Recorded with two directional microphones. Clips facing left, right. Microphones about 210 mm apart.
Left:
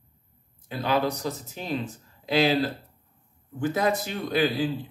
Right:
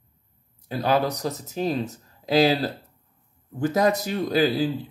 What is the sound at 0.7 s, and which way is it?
Speech, 40° right (ahead or behind).